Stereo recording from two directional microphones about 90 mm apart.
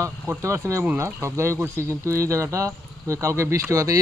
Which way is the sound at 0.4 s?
35° right (ahead or behind).